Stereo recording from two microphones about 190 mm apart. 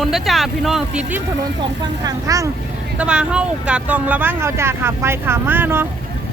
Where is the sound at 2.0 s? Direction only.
20° right (ahead or behind).